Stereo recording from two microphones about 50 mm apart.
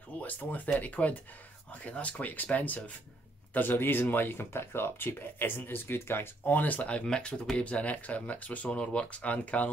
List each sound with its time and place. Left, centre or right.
0.2 s speech: left
3.5 s speech: left
6.4 s speech: left